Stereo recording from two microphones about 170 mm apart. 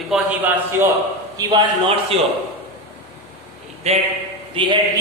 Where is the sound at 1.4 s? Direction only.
25° right (ahead or behind).